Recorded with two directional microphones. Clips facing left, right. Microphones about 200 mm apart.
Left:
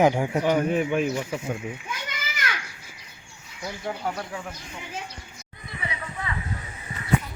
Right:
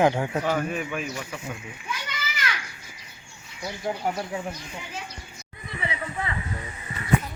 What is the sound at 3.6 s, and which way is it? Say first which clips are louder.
Speech: right 2 dB; 10° right (ahead or behind).